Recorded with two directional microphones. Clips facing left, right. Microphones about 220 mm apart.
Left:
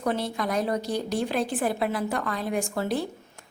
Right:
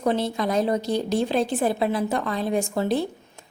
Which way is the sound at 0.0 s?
25° right (ahead or behind).